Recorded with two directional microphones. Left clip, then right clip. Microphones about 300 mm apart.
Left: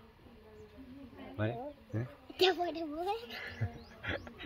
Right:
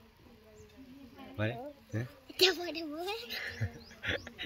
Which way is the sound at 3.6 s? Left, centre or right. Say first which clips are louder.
Right 3 dB; right.